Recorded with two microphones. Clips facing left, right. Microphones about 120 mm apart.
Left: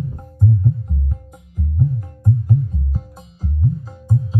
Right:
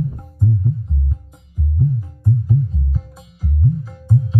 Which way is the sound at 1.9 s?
55° left (ahead or behind).